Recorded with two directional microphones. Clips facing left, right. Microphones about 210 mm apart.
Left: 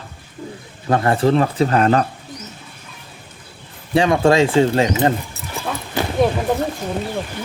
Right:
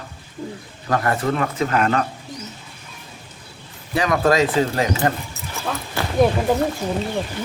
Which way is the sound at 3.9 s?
30° left (ahead or behind).